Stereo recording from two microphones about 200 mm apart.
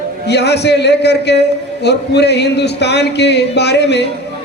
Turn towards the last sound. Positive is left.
turn(degrees=55)  # may be behind; listen again after turning